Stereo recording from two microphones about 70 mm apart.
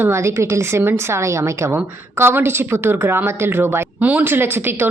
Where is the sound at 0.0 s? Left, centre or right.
Right.